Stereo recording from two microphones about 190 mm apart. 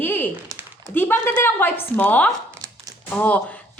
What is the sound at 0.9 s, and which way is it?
A woman's voice, 10° left (ahead or behind).